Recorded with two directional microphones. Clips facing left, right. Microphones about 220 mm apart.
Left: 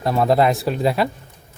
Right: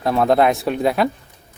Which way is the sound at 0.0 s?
Centre (ahead or behind).